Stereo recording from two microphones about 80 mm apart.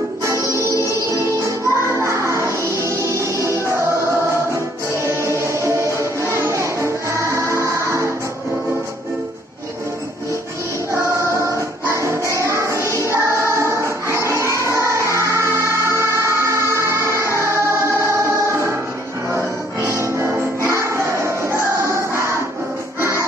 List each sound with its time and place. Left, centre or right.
0.2 s music: right
4.9 s music: right
10.9 s music: right
19.8 s music: right